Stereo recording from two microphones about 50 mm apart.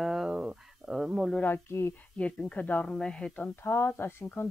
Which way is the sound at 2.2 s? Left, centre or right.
Left.